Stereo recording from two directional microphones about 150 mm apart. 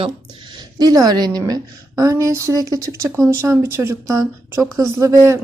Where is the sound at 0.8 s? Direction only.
25° right (ahead or behind).